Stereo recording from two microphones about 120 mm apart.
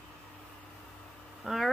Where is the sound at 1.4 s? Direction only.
5° right (ahead or behind).